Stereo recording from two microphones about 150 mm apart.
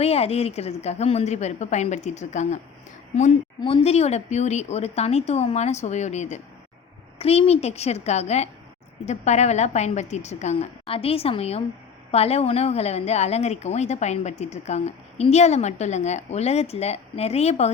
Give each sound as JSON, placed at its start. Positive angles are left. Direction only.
{"t": 0.0, "sound": "a woman's voice", "side_deg": 45}
{"t": 3.6, "sound": "a woman's voice", "side_deg": 40}